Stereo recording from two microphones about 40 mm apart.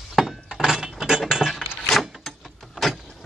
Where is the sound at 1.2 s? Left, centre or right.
Centre.